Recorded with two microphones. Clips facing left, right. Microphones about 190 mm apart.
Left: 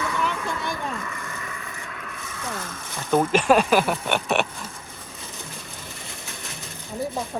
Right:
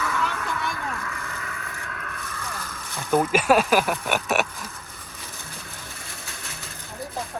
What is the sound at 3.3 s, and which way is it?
Speech, 5° right (ahead or behind).